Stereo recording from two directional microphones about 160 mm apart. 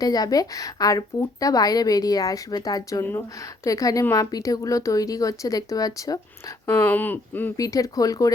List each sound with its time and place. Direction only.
0.0 s a woman's voice: 25° left (ahead or behind)